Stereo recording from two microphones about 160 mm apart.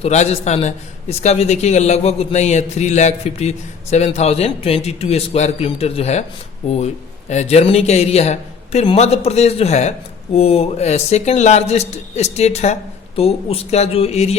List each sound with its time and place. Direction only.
0.0 s a man's voice: 45° left (ahead or behind)